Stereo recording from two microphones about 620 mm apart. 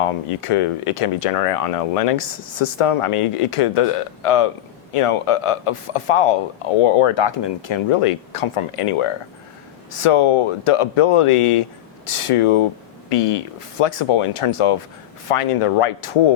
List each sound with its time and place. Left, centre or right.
0.0 s speech: left